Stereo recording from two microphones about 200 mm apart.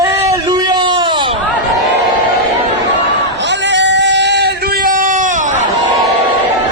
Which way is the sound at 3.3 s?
65° right (ahead or behind).